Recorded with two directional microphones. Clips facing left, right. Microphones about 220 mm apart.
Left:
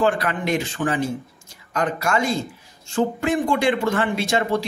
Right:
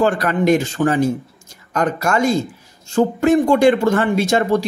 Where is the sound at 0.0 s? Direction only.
45° right (ahead or behind).